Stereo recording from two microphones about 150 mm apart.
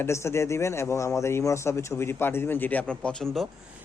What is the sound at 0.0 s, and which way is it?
Speech, 15° left (ahead or behind).